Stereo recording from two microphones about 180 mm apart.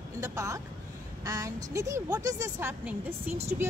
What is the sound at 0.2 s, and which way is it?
A woman's voice, 15° right (ahead or behind).